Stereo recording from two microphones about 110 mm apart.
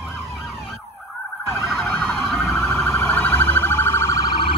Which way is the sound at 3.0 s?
15° left (ahead or behind).